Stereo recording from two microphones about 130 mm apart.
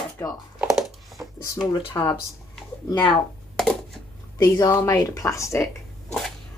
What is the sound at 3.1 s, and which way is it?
Computer keyboard, 5° left (ahead or behind).